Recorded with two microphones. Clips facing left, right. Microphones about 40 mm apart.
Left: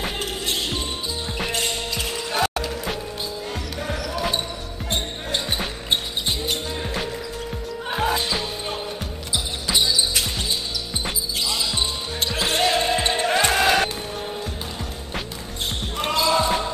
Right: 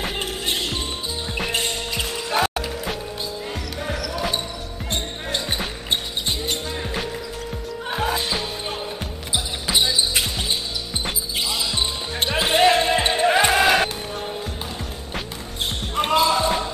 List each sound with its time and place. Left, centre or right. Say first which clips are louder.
1.5 s basketball bounce: even; centre
2.1 s music: right 2 dB; centre
4.1 s basketball bounce: left 1 dB; centre
4.9 s music: left 1 dB; centre
9.3 s basketball bounce: right 1 dB; centre
11.4 s basketball bounce: even; centre
12.2 s basketball bounce: right 4 dB; right; by 14.3 s centre
16.0 s basketball bounce: right 2 dB; centre
16.4 s basketball bounce: right 1 dB; centre